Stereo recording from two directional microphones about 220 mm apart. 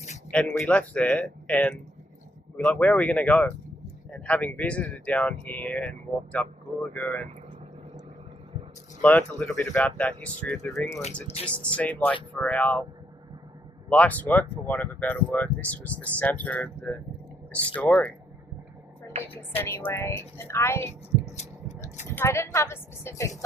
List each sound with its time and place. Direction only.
0.3 s speech: 5° left (ahead or behind)
9.0 s speech: 5° left (ahead or behind)
13.9 s speech: 5° left (ahead or behind)
19.3 s speech: 10° left (ahead or behind)
21.3 s a sound: 35° left (ahead or behind)
22.1 s speech: 10° left (ahead or behind)